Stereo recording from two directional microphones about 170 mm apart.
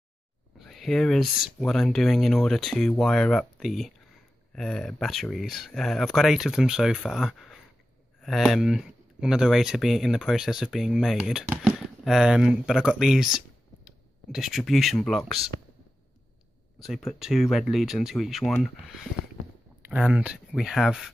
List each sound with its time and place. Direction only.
0.6 s speech: centre (ahead or behind)
16.8 s speech: centre (ahead or behind)